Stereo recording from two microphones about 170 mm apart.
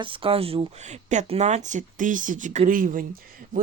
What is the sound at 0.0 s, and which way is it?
Speech, 30° right (ahead or behind).